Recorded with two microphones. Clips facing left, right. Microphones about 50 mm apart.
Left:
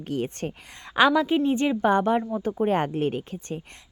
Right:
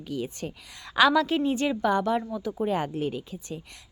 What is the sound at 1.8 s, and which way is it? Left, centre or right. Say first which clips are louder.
A woman's voice: left 4 dB; left.